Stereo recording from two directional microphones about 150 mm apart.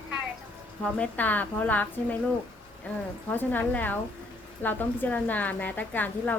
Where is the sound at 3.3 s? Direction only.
10° left (ahead or behind).